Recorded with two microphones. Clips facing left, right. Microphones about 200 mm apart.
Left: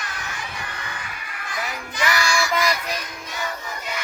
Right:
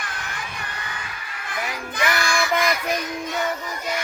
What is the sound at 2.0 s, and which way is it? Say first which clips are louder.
Child singing: even; 55° right (ahead or behind).